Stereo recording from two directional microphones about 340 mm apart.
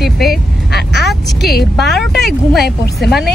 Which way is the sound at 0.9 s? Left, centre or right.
Centre.